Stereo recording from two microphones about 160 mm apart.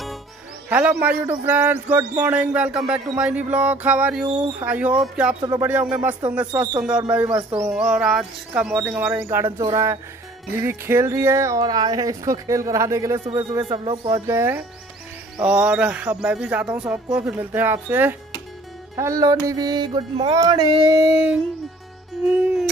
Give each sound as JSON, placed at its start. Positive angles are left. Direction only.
{"t": 0.7, "sound": "a man's voice", "side_deg": -10}
{"t": 5.4, "sound": "speech", "side_deg": -25}
{"t": 5.7, "sound": "a man's voice", "side_deg": -10}
{"t": 7.2, "sound": "speech", "side_deg": -25}
{"t": 7.6, "sound": "a man's voice", "side_deg": -5}